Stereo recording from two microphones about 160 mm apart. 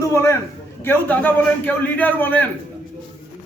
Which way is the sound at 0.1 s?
15° left (ahead or behind).